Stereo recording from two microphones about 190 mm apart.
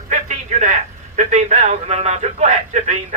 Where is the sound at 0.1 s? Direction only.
40° right (ahead or behind).